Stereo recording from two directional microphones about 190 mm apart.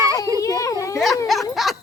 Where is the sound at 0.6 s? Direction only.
15° left (ahead or behind).